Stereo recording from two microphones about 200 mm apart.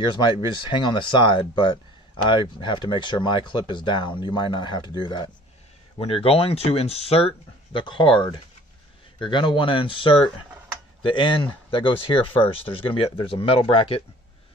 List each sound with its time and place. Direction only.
0.1 s speech: 25° left (ahead or behind)